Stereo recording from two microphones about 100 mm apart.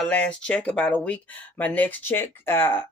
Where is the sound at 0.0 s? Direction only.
10° left (ahead or behind).